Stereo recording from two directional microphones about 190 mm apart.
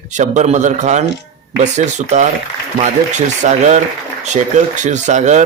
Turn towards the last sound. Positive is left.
turn(degrees=-40)  # may be behind; listen again after turning